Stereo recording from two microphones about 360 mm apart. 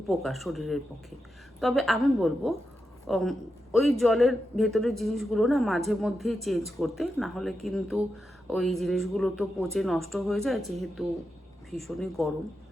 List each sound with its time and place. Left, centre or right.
0.1 s a man's voice: centre